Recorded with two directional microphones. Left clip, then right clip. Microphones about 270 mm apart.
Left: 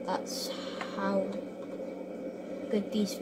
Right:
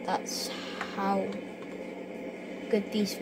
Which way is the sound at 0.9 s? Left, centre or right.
Right.